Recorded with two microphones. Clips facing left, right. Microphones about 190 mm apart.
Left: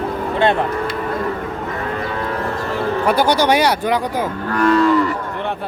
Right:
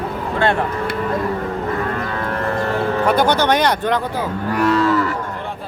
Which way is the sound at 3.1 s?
10° left (ahead or behind).